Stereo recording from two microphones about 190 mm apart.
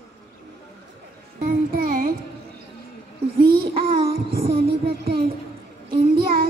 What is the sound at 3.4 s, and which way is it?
Child singing, 50° right (ahead or behind).